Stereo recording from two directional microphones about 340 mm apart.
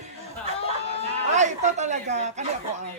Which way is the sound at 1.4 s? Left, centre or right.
Right.